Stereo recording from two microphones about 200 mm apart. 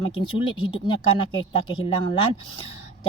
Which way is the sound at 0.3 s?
25° left (ahead or behind).